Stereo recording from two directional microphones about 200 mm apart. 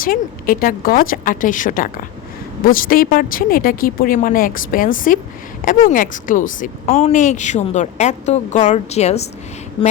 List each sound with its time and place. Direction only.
0.0 s a woman's voice: 45° left (ahead or behind)